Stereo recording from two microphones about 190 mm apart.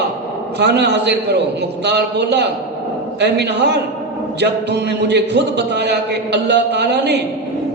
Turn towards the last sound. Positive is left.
turn(degrees=-60)  # may be behind; listen again after turning